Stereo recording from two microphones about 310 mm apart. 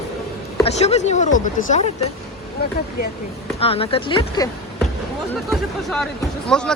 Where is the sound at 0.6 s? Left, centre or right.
Left.